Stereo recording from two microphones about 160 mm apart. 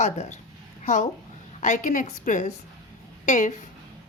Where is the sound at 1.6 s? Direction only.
55° left (ahead or behind).